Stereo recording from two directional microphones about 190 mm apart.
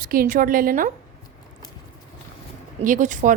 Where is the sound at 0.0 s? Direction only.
45° right (ahead or behind).